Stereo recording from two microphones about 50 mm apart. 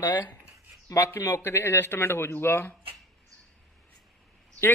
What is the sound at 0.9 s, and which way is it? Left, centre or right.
Speech, left.